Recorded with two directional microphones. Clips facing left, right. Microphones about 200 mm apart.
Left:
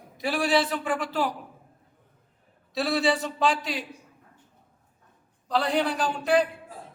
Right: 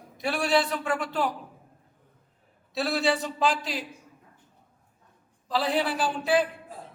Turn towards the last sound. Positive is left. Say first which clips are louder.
# left 1 dB
turn(degrees=-5)  # may be behind; listen again after turning